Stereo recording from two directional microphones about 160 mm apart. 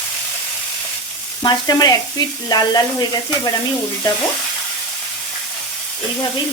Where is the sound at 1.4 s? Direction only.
25° left (ahead or behind).